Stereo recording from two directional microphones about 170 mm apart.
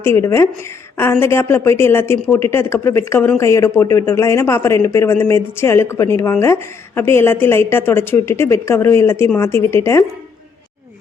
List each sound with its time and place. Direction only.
0.0 s a woman's voice: 15° left (ahead or behind)